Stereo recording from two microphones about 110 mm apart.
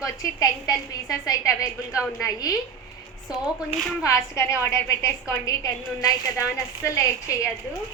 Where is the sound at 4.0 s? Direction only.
30° left (ahead or behind).